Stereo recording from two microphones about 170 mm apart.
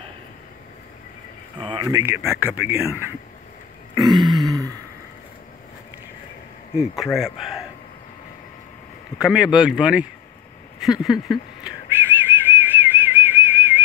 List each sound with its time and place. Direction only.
1.6 s speech: 30° right (ahead or behind)
2.2 s speech: 5° right (ahead or behind)
3.9 s a sound: 25° right (ahead or behind)
7.2 s speech: centre (ahead or behind)
9.2 s speech: 5° right (ahead or behind)
10.8 s a sound: centre (ahead or behind)
11.9 s whistling: 10° right (ahead or behind)